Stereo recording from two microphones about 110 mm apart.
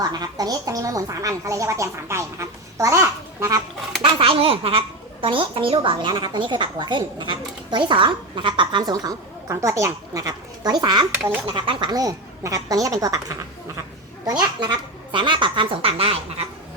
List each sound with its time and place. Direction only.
0.0 s speech: 35° right (ahead or behind)
4.0 s a child's voice: 55° right (ahead or behind); by 13.3 s 30° right (ahead or behind)
14.3 s a child's voice: 45° right (ahead or behind); by 16.2 s 60° right (ahead or behind)